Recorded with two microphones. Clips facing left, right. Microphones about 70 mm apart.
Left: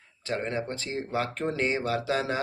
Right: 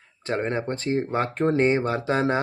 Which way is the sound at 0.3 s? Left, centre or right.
Right.